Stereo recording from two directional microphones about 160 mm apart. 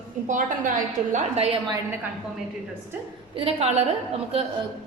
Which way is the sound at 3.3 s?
40° right (ahead or behind).